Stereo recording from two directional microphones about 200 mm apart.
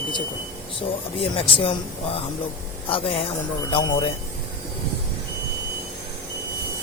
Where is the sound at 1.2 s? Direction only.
25° left (ahead or behind).